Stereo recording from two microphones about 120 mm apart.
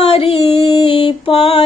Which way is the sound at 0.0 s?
50° left (ahead or behind).